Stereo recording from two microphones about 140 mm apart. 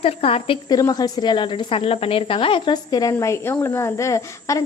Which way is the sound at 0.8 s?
25° left (ahead or behind).